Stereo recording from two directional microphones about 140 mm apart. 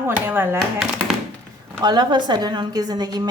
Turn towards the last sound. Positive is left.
turn(degrees=-30)  # may be behind; listen again after turning